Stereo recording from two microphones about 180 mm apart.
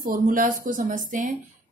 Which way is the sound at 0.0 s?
50° right (ahead or behind).